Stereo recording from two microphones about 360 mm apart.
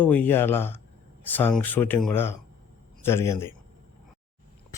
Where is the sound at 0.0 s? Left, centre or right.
Centre.